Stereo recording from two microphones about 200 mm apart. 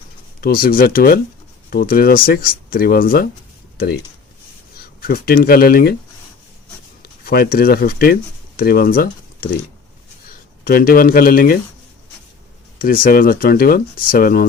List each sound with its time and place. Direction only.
0.4 s speech: 50° left (ahead or behind)
4.9 s speech: 50° left (ahead or behind)
7.0 s speech: 50° left (ahead or behind)
10.6 s speech: 50° left (ahead or behind)
12.8 s speech: 45° left (ahead or behind)